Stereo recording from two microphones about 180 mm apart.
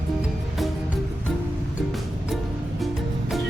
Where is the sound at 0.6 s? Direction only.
Centre (ahead or behind).